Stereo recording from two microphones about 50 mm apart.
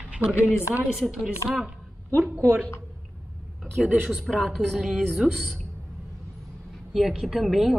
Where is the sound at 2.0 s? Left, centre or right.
Right.